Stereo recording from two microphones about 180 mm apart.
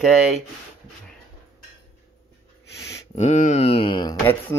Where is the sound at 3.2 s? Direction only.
40° left (ahead or behind).